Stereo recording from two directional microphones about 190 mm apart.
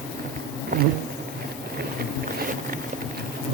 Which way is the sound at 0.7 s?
45° right (ahead or behind).